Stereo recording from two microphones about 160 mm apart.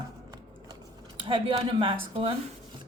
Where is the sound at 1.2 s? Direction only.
30° right (ahead or behind).